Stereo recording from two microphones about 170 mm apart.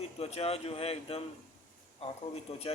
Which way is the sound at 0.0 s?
35° left (ahead or behind).